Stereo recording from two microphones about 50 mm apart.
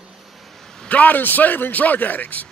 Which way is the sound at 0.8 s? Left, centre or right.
Left.